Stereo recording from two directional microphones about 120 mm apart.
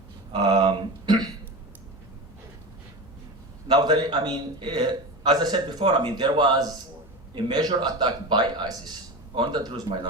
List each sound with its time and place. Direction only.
0.3 s a man's voice: 40° right (ahead or behind)
3.7 s a man's voice: 40° right (ahead or behind)